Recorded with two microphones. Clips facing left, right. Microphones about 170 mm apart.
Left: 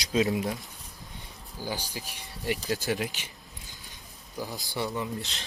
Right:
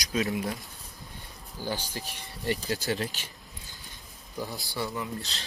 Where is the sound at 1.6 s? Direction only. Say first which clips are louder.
Right 1 dB; 10° left (ahead or behind).